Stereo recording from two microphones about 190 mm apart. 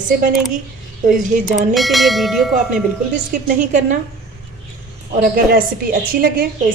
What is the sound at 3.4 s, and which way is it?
Speech, 40° right (ahead or behind).